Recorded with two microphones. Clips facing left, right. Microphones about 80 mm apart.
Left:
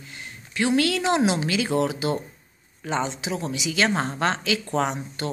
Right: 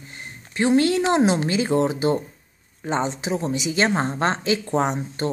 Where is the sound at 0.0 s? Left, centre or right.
Right.